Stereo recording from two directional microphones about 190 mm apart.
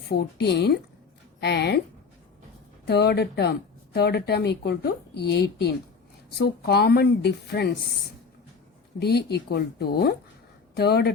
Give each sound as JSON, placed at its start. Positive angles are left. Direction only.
{"t": 0.1, "sound": "a woman's voice", "side_deg": 60}
{"t": 2.8, "sound": "speech", "side_deg": 60}
{"t": 9.0, "sound": "speech", "side_deg": 60}